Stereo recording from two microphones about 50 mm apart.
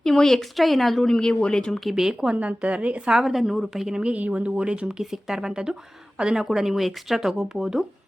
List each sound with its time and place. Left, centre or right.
0.0 s speech: centre
1.3 s speech: centre
1.8 s a woman's voice: centre
2.2 s a woman's voice: right
3.2 s a woman's voice: centre
3.9 s a woman's voice: right